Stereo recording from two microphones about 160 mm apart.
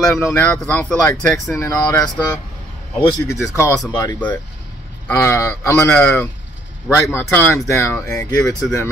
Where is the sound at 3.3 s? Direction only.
15° left (ahead or behind).